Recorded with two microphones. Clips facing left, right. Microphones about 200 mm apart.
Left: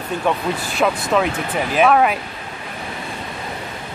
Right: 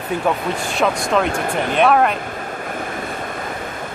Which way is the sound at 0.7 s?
Centre (ahead or behind).